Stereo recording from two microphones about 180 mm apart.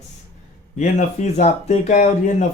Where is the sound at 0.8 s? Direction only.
40° left (ahead or behind).